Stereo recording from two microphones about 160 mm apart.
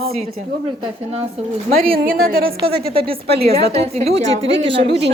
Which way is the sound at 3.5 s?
40° right (ahead or behind).